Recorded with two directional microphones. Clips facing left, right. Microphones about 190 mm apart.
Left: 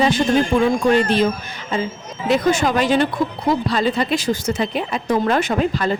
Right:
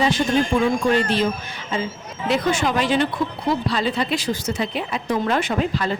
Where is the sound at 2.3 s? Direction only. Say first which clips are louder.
Left 4 dB; 45° left (ahead or behind).